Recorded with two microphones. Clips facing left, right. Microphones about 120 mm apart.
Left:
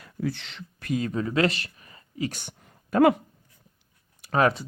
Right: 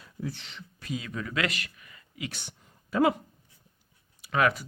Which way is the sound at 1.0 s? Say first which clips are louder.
Left 8 dB; 30° left (ahead or behind).